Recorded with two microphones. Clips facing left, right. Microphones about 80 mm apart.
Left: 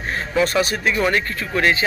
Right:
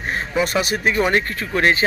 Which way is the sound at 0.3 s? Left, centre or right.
Centre.